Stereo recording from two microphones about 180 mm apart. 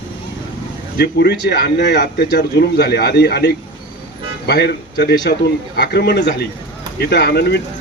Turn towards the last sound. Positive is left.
turn(degrees=70)  # may be behind; listen again after turning